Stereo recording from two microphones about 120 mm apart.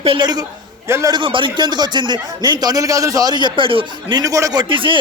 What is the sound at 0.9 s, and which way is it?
Speech, 25° right (ahead or behind).